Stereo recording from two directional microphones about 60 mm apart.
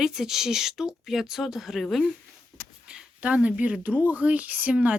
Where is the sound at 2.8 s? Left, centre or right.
Centre.